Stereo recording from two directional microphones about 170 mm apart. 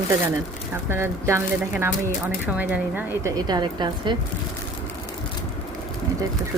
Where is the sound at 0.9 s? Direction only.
15° right (ahead or behind).